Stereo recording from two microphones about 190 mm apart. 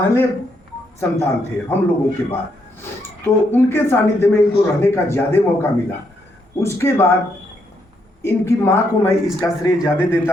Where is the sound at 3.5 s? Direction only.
10° left (ahead or behind).